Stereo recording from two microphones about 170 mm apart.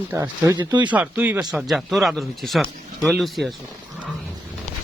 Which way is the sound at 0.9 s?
10° right (ahead or behind).